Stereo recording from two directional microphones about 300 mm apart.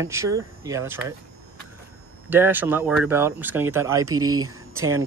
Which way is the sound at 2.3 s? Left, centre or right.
Centre.